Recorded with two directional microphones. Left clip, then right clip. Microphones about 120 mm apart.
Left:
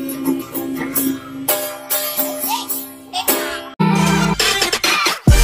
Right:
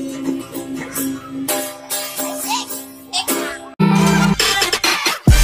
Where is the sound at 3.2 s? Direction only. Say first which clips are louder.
Left 5 dB; 40° left (ahead or behind).